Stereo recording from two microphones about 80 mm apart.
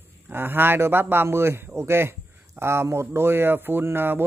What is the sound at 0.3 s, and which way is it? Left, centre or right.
A man's voice, right.